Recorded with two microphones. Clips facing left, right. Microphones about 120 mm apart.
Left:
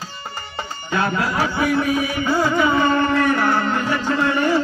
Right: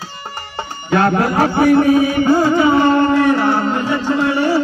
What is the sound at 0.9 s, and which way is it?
Speech, 60° right (ahead or behind).